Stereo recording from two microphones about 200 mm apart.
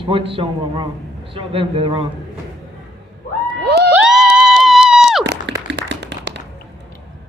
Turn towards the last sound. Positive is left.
turn(degrees=-60)  # may be behind; listen again after turning